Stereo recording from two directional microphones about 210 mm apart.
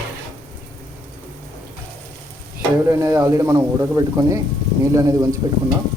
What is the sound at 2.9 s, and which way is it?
Speech, 15° right (ahead or behind).